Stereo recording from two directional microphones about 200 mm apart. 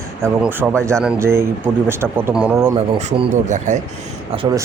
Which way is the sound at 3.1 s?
35° right (ahead or behind).